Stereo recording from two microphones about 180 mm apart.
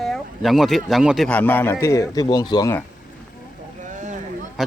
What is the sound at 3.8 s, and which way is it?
Boat, 45° right (ahead or behind).